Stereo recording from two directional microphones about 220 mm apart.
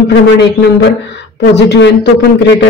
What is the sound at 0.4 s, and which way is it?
Speech, 50° left (ahead or behind).